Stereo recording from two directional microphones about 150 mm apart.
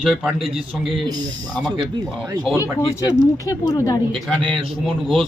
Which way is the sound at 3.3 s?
20° left (ahead or behind).